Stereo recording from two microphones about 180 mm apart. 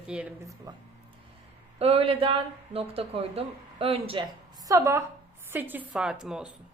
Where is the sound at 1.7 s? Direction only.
35° right (ahead or behind).